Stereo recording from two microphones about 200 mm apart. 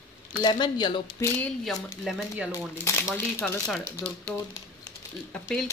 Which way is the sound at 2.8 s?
15° left (ahead or behind).